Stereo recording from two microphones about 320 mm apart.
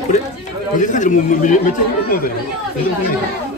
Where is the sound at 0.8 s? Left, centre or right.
Left.